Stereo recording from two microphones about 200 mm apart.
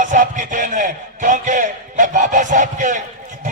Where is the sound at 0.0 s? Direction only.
40° right (ahead or behind).